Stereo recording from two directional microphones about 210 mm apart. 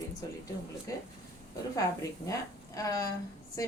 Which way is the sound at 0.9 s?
15° left (ahead or behind).